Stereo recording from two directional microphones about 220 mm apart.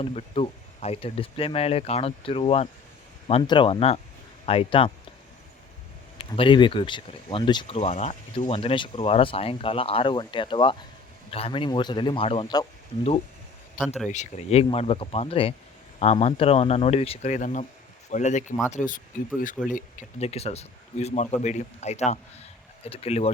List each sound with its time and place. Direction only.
0.0 s speech: 25° left (ahead or behind)
6.1 s speech: 25° left (ahead or behind)
13.7 s speech: centre (ahead or behind)
14.1 s speech: 30° left (ahead or behind)